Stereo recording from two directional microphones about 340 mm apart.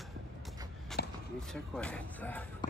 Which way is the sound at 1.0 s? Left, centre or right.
Left.